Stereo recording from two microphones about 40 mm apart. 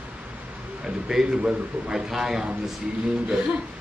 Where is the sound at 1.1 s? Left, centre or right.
Centre.